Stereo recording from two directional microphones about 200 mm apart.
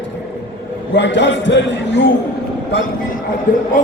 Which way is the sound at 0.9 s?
65° left (ahead or behind).